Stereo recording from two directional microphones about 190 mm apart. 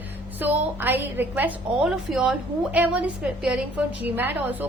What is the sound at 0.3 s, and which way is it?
A woman's voice, 10° right (ahead or behind).